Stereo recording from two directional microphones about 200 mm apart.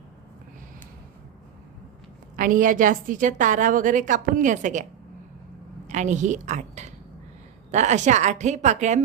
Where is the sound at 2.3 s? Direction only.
40° right (ahead or behind).